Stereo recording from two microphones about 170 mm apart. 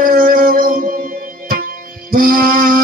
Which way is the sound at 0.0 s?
60° right (ahead or behind).